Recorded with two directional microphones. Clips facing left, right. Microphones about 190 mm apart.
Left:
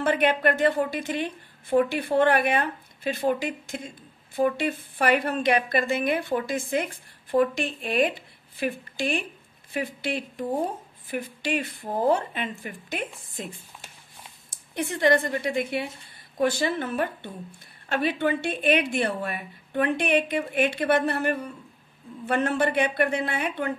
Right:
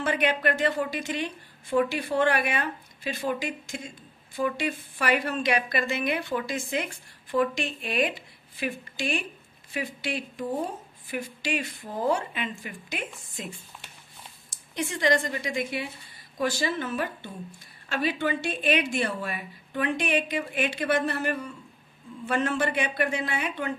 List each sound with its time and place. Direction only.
0.0 s a woman's voice: 55° left (ahead or behind)